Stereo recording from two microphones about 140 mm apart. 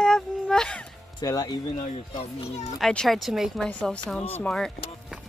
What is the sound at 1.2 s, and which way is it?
Speech, 25° left (ahead or behind).